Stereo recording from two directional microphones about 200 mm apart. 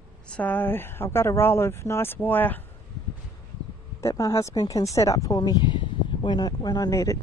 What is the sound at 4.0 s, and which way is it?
Speech, 15° left (ahead or behind).